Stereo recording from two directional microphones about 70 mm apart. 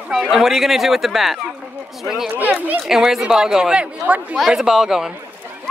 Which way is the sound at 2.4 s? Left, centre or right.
Right.